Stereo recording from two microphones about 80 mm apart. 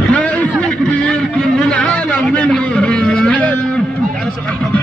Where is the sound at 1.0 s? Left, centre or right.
Centre.